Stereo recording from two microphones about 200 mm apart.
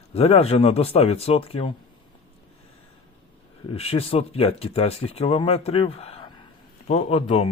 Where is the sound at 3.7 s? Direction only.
30° left (ahead or behind).